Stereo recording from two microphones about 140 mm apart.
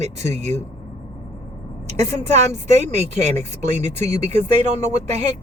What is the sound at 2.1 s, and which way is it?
Speech, 50° right (ahead or behind).